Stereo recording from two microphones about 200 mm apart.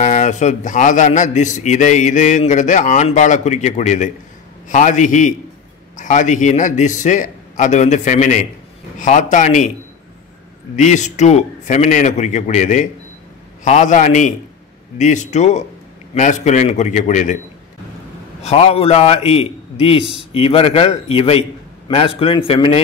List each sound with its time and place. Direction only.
0.0 s a man's voice: 40° left (ahead or behind)
10.8 s a man's voice: 35° left (ahead or behind)
18.4 s a man's voice: 30° left (ahead or behind)